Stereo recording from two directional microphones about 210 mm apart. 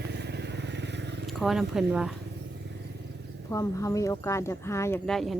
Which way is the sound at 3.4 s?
15° left (ahead or behind).